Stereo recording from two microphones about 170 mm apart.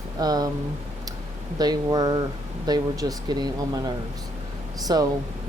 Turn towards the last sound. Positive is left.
turn(degrees=-20)  # may be behind; listen again after turning